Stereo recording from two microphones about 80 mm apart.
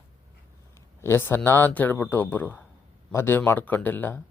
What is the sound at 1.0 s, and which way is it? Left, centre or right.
Speech, left.